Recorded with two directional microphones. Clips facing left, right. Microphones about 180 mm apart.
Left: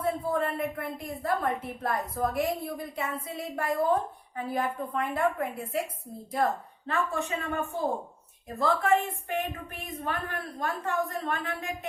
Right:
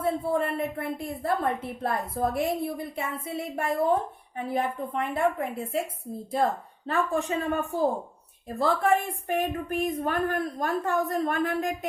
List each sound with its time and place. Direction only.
0.0 s a woman's voice: 25° right (ahead or behind)
8.4 s a woman's voice: 30° right (ahead or behind)